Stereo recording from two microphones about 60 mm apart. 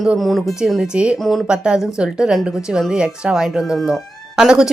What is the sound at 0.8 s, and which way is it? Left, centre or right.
Speech, centre.